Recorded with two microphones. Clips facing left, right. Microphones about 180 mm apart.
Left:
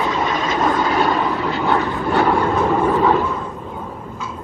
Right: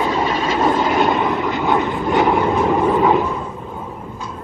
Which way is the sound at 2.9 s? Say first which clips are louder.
Right 1 dB; 15° right (ahead or behind).